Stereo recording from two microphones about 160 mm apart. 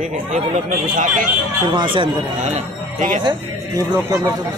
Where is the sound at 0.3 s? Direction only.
60° right (ahead or behind).